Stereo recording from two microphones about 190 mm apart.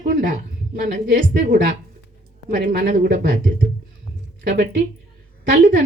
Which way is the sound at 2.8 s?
45° right (ahead or behind).